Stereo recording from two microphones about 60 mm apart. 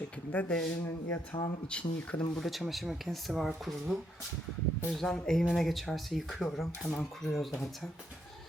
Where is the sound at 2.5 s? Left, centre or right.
Centre.